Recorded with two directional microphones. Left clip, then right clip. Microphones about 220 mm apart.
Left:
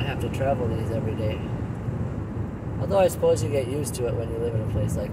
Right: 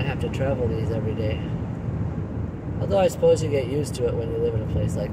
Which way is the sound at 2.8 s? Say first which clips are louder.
Right 1 dB; 35° right (ahead or behind).